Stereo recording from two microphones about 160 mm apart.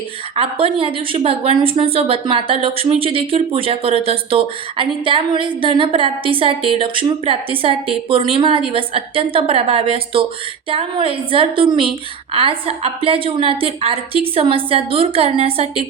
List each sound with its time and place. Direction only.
0.3 s a woman's voice: 35° right (ahead or behind)